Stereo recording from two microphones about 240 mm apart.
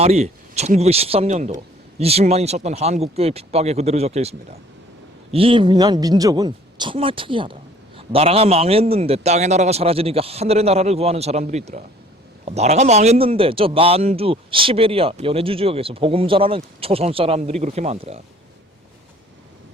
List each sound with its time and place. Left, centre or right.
0.0 s a man's voice: right